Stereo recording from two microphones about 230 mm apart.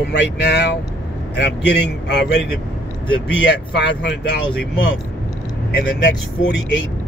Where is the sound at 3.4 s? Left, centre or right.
Left.